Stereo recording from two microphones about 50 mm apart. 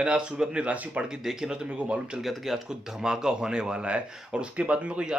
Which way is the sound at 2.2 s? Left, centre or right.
Centre.